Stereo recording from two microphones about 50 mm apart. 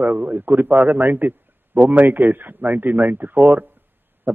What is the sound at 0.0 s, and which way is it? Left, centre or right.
A man's voice, right.